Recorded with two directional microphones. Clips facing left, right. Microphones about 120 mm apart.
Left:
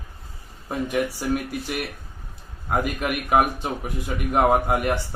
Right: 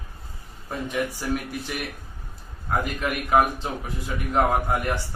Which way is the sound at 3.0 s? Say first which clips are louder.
Right 1 dB; 15° left (ahead or behind).